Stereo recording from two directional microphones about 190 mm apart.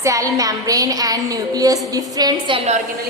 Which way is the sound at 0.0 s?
15° right (ahead or behind).